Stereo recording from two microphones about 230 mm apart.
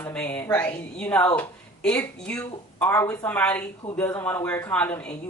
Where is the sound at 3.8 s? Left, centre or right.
Centre.